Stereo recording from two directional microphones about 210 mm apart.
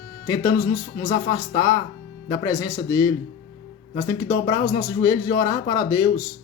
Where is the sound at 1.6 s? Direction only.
15° left (ahead or behind).